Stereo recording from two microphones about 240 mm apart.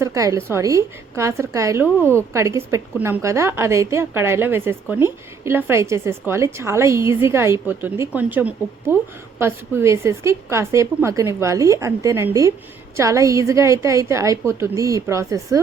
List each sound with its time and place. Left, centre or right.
0.0 s a woman's voice: centre